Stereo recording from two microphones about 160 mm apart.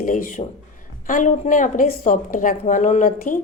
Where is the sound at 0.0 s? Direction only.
55° left (ahead or behind).